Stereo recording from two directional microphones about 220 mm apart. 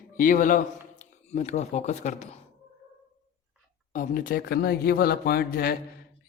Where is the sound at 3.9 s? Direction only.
40° left (ahead or behind).